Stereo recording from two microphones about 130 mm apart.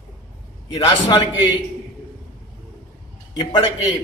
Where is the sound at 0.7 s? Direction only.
45° left (ahead or behind).